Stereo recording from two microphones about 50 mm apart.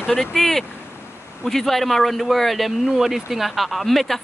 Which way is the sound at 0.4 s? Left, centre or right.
Centre.